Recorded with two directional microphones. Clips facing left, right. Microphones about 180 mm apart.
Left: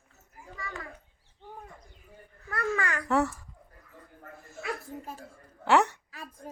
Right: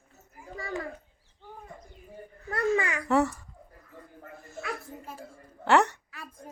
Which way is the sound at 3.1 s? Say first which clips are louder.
Right 2 dB; centre (ahead or behind).